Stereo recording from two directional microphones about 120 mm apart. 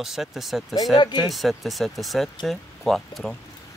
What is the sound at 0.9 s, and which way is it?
Speech, 35° left (ahead or behind).